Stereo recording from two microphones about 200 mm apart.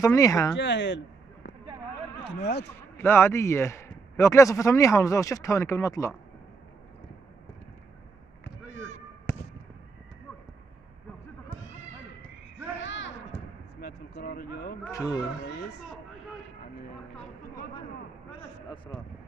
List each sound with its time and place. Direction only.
0.0 s a man's voice: 15° left (ahead or behind)
0.6 s speech: 65° left (ahead or behind)
3.0 s a man's voice: 10° left (ahead or behind)
12.8 s a sound: 65° left (ahead or behind)
13.7 s a sound: 50° left (ahead or behind)
14.9 s speech: 20° left (ahead or behind)